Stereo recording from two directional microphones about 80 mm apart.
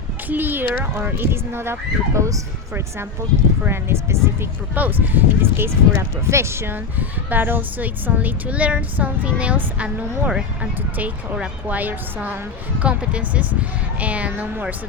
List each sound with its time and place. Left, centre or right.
0.3 s speech: right